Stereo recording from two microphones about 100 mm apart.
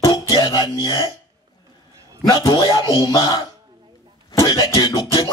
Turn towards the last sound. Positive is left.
turn(degrees=40)  # may be behind; listen again after turning